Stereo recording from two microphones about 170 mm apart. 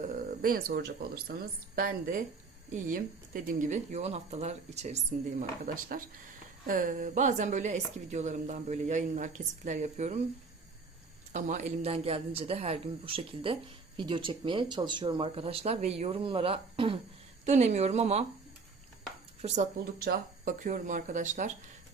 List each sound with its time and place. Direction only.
0.1 s speech: 55° right (ahead or behind)
3.6 s a woman's voice: 45° right (ahead or behind)
11.3 s a man's voice: 50° right (ahead or behind); by 17.0 s 30° right (ahead or behind)
17.4 s a man's voice: 40° right (ahead or behind)
19.4 s a man's voice: 40° right (ahead or behind)
19.8 s a woman's voice: 55° right (ahead or behind)